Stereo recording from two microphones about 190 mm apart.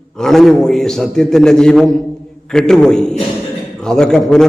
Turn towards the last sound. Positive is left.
turn(degrees=5)  # may be behind; listen again after turning